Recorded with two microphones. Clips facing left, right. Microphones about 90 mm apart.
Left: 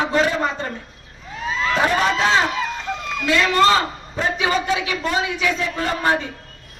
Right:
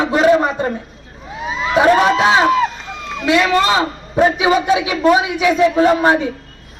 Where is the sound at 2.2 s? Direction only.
15° right (ahead or behind).